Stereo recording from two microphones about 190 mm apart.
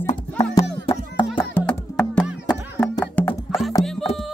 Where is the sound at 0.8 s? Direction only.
25° left (ahead or behind).